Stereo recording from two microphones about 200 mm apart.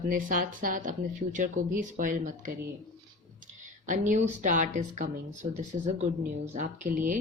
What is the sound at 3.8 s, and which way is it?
A woman's voice, 40° right (ahead or behind).